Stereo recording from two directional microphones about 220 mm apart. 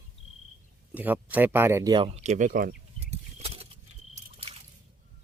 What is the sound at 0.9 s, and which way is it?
Speech, 5° right (ahead or behind).